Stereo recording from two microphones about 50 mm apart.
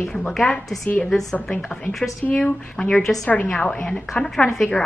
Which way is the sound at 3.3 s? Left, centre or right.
Left.